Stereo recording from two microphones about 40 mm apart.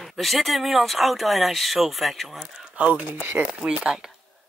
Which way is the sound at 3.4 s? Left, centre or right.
Right.